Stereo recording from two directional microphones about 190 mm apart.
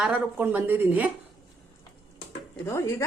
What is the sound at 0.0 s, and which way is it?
A woman's voice, 10° right (ahead or behind).